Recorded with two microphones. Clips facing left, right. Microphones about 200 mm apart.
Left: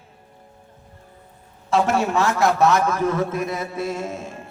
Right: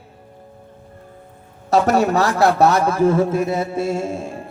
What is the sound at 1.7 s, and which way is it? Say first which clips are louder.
A man's voice: right 4 dB; 40° right (ahead or behind).